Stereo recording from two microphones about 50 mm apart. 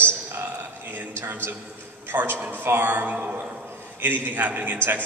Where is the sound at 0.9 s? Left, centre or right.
Right.